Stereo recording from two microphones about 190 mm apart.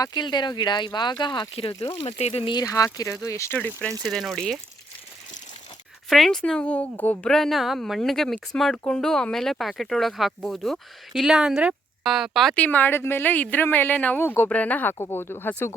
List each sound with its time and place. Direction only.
0.0 s a woman's voice: 20° left (ahead or behind); by 4.6 s centre (ahead or behind)
6.1 s a woman's voice: centre (ahead or behind)